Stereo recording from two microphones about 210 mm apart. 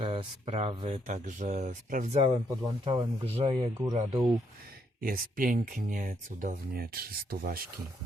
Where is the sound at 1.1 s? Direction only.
35° right (ahead or behind).